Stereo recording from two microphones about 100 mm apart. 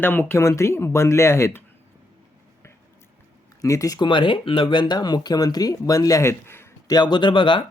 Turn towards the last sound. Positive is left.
turn(degrees=55)  # may be behind; listen again after turning